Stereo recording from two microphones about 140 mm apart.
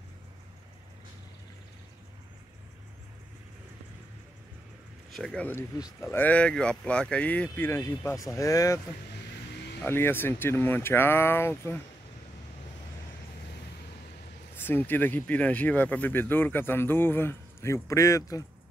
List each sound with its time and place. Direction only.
5.1 s speech: 5° left (ahead or behind)
14.6 s speech: 15° left (ahead or behind)